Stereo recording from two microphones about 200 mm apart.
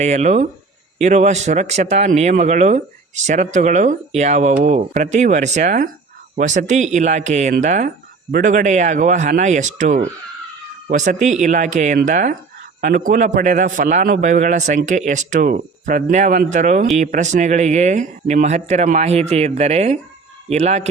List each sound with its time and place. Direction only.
0.0 s speech: 35° right (ahead or behind)